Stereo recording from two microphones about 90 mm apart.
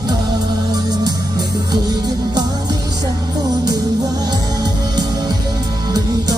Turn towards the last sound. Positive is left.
turn(degrees=-45)  # may be behind; listen again after turning